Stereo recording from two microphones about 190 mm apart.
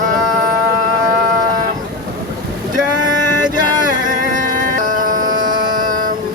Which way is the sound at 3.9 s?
45° right (ahead or behind).